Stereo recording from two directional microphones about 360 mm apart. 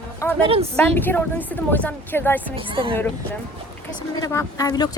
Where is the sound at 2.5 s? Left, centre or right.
Centre.